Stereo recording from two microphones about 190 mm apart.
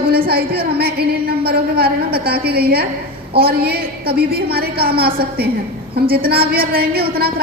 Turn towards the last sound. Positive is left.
turn(degrees=-55)  # may be behind; listen again after turning